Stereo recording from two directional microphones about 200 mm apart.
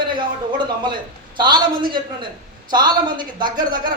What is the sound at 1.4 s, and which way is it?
A man's voice, 20° right (ahead or behind).